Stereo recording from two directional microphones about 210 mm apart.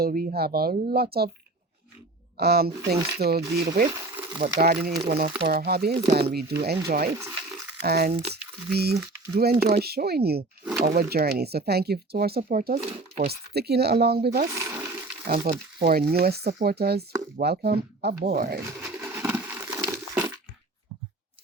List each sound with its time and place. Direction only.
0.0 s speech: 40° right (ahead or behind)
2.4 s speech: 50° right (ahead or behind)
3.8 s insect: 15° right (ahead or behind)
4.5 s speech: 45° right (ahead or behind)
14.5 s water: 10° right (ahead or behind)
15.2 s speech: 50° right (ahead or behind)
18.8 s a sound: 10° right (ahead or behind)